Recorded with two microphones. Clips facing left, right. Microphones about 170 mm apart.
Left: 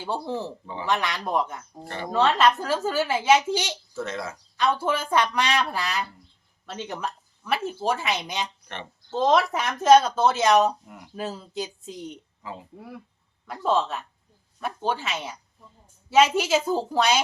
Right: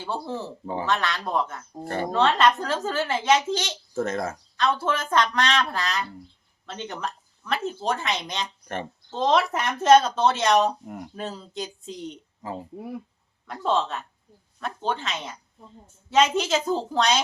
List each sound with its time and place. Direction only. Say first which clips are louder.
0.0 s speech: left 2 dB; 15° left (ahead or behind)
0.6 s speech: right 5 dB; 45° right (ahead or behind)
0.9 s speech: left 2 dB; 10° left (ahead or behind)
1.8 s speech: right 7 dB; 45° right (ahead or behind)
2.1 s speech: left 1 dB; 5° left (ahead or behind)
3.9 s speech: right 6 dB; 50° right (ahead or behind)
4.5 s speech: left 1 dB; 10° left (ahead or behind)
8.6 s speech: right 6 dB; 45° right (ahead or behind)
9.0 s speech: left 1 dB; 5° left (ahead or behind)
10.8 s speech: right 9 dB; 45° right (ahead or behind)
11.1 s speech: left 5 dB; 5° left (ahead or behind)
12.4 s speech: right 6 dB; 40° right (ahead or behind)
12.7 s speech: right 6 dB; 20° right (ahead or behind)
13.5 s speech: left 1 dB; 5° left (ahead or behind)